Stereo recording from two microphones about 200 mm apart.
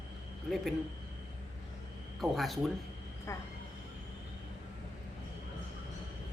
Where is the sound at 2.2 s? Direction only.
Centre (ahead or behind).